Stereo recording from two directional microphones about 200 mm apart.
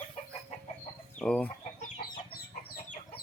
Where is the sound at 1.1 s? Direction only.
5° left (ahead or behind).